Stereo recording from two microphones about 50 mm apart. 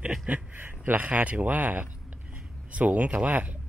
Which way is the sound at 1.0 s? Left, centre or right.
Right.